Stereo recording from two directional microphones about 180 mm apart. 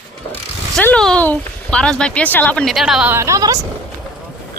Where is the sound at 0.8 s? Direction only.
5° left (ahead or behind).